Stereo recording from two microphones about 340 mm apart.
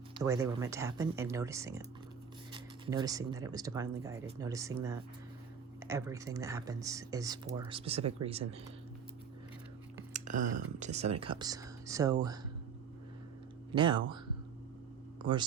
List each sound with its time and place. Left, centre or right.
0.1 s speech: centre
10.1 s speech: right
13.7 s speech: centre